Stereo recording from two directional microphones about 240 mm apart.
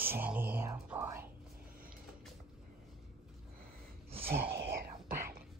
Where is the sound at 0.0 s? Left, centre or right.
Centre.